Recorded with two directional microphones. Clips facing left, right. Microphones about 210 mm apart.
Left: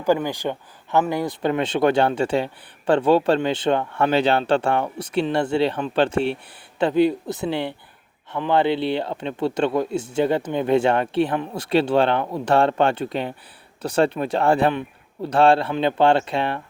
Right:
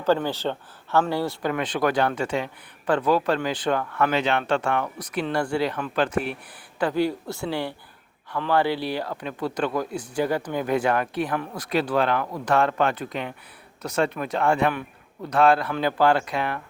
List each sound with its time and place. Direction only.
0.0 s speech: 15° left (ahead or behind); by 16.6 s 30° left (ahead or behind)